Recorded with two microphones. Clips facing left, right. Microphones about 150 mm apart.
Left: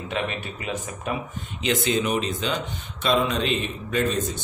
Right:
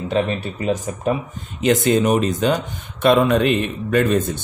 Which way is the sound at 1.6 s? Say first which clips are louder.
Right 8 dB; 45° right (ahead or behind).